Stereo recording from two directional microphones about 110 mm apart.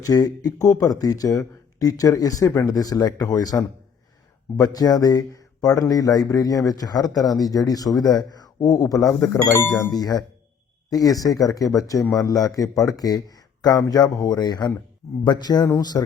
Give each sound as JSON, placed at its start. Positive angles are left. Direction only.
{"t": 0.0, "sound": "speech", "side_deg": 35}